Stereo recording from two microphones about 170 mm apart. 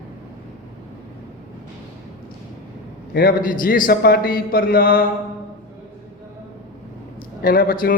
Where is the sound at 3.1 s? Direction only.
55° left (ahead or behind).